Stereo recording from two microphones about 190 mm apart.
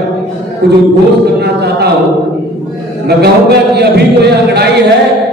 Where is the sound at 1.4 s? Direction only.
60° right (ahead or behind).